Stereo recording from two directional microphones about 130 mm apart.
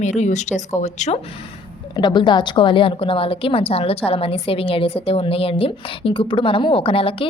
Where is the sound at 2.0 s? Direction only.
35° left (ahead or behind).